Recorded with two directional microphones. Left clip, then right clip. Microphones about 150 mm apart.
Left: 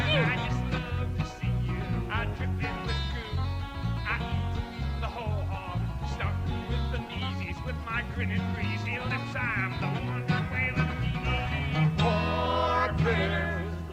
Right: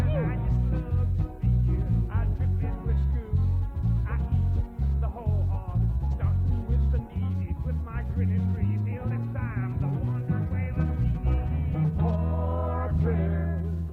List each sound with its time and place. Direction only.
0.0 s music: 30° left (ahead or behind)
7.9 s music: 25° left (ahead or behind)